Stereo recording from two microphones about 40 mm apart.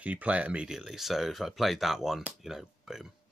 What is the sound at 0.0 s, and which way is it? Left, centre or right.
Speech, right.